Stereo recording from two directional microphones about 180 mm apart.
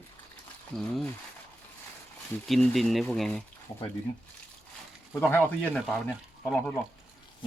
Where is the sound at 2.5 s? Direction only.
Centre (ahead or behind).